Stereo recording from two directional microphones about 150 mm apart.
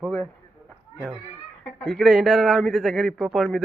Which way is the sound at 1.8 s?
Centre (ahead or behind).